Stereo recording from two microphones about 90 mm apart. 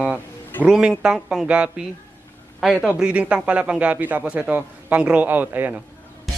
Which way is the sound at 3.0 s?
15° right (ahead or behind).